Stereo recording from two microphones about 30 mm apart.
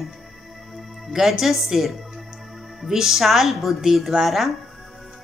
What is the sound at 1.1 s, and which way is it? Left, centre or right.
A woman's voice, centre.